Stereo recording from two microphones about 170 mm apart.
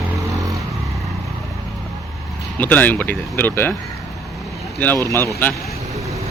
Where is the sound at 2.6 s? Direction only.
10° left (ahead or behind).